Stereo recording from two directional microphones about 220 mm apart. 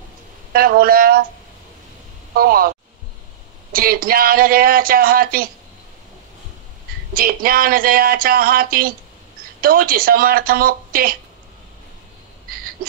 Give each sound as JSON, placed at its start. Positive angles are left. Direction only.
{"t": 0.5, "sound": "speech", "side_deg": -40}
{"t": 2.3, "sound": "speech", "side_deg": -40}
{"t": 3.7, "sound": "speech", "side_deg": -40}
{"t": 7.2, "sound": "speech", "side_deg": -40}